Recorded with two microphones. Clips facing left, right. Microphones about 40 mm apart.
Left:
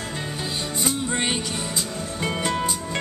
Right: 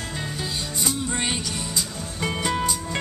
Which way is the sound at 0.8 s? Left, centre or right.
Centre.